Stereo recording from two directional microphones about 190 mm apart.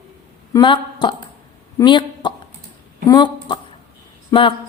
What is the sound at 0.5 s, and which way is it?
A woman's voice, 25° left (ahead or behind).